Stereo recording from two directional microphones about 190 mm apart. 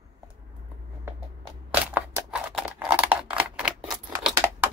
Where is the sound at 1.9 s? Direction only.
5° right (ahead or behind).